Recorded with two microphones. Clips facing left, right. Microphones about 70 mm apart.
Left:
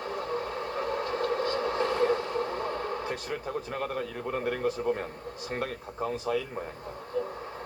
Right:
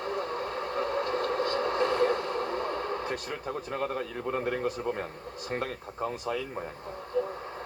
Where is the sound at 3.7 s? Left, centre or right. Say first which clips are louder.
Right 1 dB; right.